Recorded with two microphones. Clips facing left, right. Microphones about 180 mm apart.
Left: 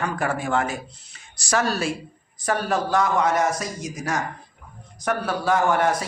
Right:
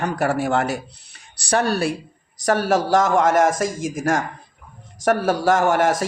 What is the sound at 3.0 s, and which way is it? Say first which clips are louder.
A man's voice: right 3 dB; 45° right (ahead or behind).